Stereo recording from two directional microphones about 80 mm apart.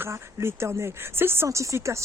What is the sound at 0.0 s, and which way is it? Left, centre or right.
Speech, right.